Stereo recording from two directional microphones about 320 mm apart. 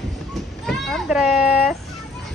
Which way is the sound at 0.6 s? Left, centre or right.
Centre.